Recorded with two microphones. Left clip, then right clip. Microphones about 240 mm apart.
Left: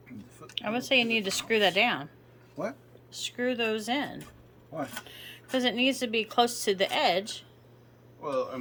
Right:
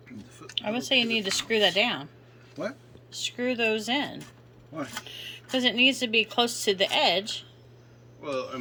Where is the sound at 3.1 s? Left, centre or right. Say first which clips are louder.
Right 1 dB; centre.